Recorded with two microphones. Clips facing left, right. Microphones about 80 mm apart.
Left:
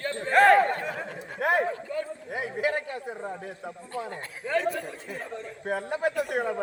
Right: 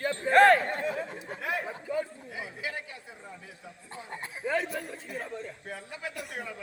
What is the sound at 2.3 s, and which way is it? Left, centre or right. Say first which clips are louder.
Speech: left 9 dB; left.